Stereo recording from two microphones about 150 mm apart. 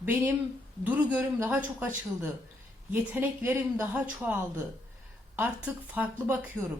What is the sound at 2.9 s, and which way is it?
Speech, 15° right (ahead or behind).